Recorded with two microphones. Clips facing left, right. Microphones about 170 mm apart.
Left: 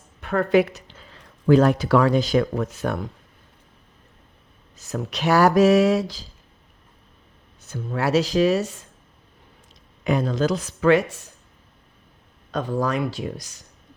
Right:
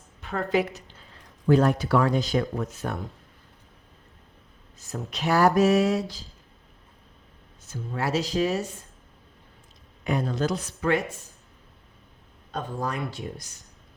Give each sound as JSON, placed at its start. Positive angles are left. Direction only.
{"t": 0.2, "sound": "speech", "side_deg": 65}
{"t": 2.7, "sound": "speech", "side_deg": 75}
{"t": 4.8, "sound": "speech", "side_deg": 80}
{"t": 7.6, "sound": "speech", "side_deg": 65}
{"t": 10.0, "sound": "speech", "side_deg": 90}
{"t": 12.5, "sound": "speech", "side_deg": 90}